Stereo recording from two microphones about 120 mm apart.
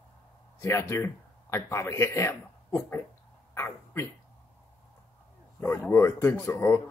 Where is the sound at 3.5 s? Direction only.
20° left (ahead or behind).